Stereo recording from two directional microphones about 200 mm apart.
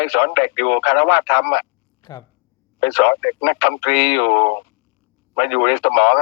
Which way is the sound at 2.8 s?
60° left (ahead or behind).